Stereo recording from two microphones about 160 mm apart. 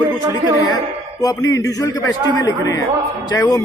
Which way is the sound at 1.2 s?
20° left (ahead or behind).